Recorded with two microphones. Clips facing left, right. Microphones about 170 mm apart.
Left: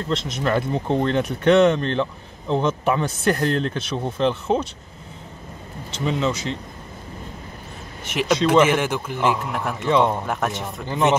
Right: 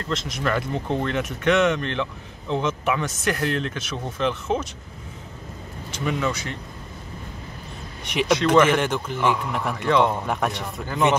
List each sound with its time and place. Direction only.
0.3 s speech: 30° left (ahead or behind)
6.0 s speech: 20° left (ahead or behind)
8.0 s a man's voice: centre (ahead or behind)
9.8 s speech: 20° left (ahead or behind)
10.2 s speech: centre (ahead or behind)